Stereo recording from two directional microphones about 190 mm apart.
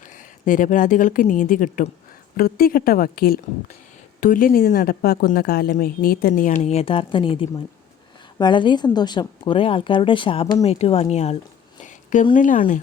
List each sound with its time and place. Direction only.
0.0 s a woman's voice: 45° left (ahead or behind)